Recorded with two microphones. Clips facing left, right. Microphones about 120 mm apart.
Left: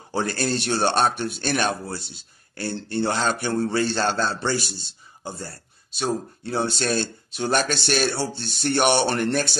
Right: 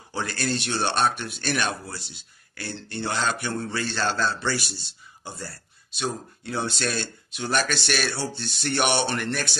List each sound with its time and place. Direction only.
0.1 s speech: 35° left (ahead or behind)